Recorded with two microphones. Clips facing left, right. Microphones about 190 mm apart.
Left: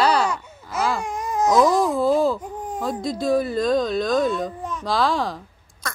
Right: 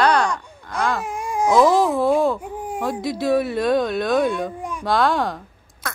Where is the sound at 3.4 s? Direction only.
70° right (ahead or behind).